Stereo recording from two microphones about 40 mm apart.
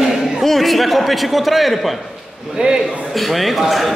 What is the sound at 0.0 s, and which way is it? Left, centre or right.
A man's voice, centre.